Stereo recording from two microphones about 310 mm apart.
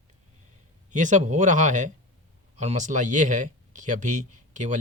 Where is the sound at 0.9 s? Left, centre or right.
Right.